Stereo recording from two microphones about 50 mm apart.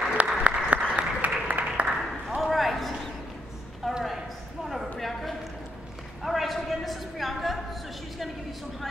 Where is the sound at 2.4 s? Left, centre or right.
Centre.